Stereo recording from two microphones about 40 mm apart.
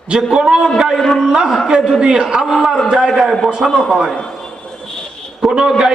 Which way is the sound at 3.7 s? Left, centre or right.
Centre.